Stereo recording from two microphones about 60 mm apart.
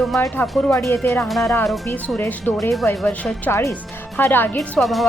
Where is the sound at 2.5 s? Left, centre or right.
Left.